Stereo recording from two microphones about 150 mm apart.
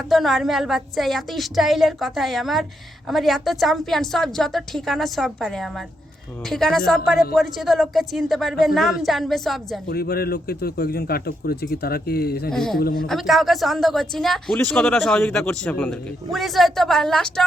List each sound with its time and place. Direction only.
0.1 s a woman's voice: centre (ahead or behind)
9.9 s speech: 90° left
12.5 s a woman's voice: centre (ahead or behind)
12.8 s speech: 80° left
13.1 s a woman's voice: centre (ahead or behind)